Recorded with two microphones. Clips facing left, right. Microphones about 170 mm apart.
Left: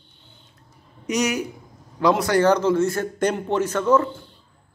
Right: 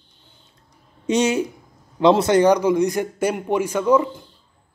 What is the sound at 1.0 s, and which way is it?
A man's voice, 25° right (ahead or behind).